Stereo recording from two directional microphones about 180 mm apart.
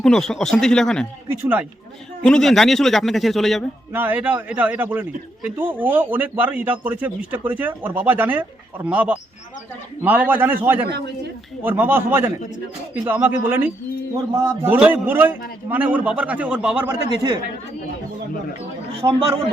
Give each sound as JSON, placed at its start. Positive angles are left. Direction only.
{"t": 0.0, "sound": "speech", "side_deg": 5}
{"t": 1.3, "sound": "a man's voice", "side_deg": -10}
{"t": 2.2, "sound": "speech", "side_deg": 5}
{"t": 3.9, "sound": "a man's voice", "side_deg": -10}
{"t": 17.1, "sound": "speech", "side_deg": -25}
{"t": 19.0, "sound": "speech", "side_deg": -30}